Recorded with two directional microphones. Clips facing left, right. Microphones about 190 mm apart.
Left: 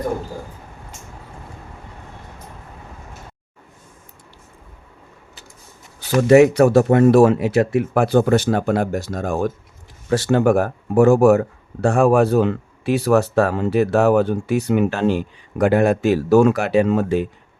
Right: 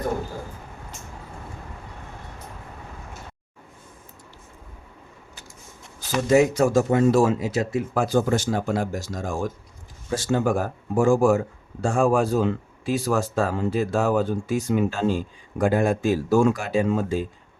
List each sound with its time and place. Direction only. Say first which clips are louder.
6.2 s speech: left 7 dB; 65° left (ahead or behind)